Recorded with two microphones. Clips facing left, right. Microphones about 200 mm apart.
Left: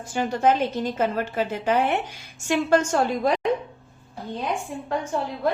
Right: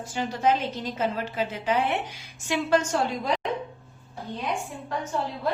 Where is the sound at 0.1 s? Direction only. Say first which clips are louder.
Left 4 dB; 50° left (ahead or behind).